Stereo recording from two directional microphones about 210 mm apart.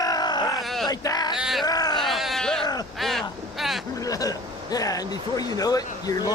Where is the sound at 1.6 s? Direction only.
20° left (ahead or behind).